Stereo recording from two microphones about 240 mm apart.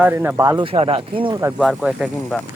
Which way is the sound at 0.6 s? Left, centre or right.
Right.